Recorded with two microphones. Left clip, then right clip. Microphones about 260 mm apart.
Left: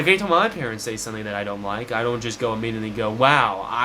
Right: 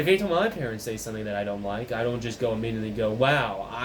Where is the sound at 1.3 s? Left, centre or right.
Left.